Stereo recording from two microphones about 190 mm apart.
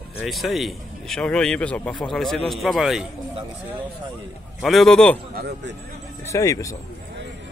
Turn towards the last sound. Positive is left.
turn(degrees=15)  # may be behind; listen again after turning